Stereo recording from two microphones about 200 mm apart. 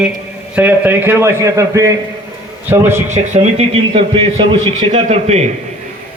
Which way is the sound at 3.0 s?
35° right (ahead or behind).